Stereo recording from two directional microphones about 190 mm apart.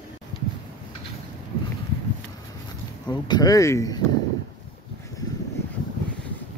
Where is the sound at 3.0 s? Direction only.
20° left (ahead or behind).